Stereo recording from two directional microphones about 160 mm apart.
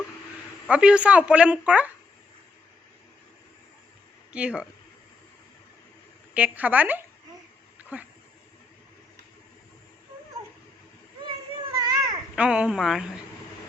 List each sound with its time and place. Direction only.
0.7 s speech: 5° right (ahead or behind)
4.3 s speech: 5° right (ahead or behind)
6.3 s speech: 10° right (ahead or behind)
7.8 s a sound: 10° right (ahead or behind)
11.2 s children playing: 30° right (ahead or behind)
12.4 s speech: 5° right (ahead or behind)